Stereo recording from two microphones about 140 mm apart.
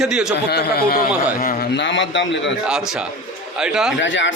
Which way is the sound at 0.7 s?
90° left.